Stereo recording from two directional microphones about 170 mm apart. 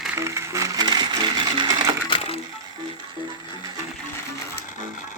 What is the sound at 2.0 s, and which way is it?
Crushing, 30° left (ahead or behind).